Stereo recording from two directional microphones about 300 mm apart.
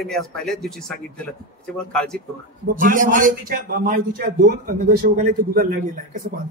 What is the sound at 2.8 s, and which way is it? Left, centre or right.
A man's voice, right.